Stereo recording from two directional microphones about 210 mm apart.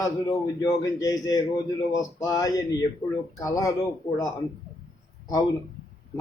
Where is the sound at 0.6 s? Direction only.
15° left (ahead or behind).